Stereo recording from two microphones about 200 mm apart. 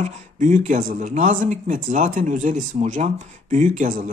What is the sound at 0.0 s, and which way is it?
A man's voice, 40° right (ahead or behind).